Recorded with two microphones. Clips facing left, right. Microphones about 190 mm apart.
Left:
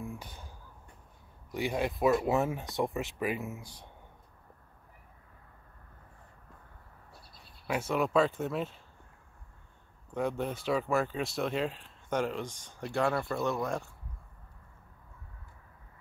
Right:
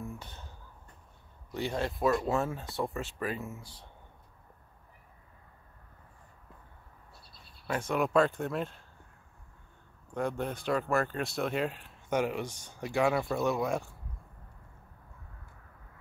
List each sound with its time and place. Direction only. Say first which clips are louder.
0.0 s a sound: left 1 dB; 10° left (ahead or behind)
1.5 s speech: left 1 dB; 15° left (ahead or behind)
7.6 s speech: even; 5° left (ahead or behind)
10.1 s speech: left 1 dB; centre (ahead or behind)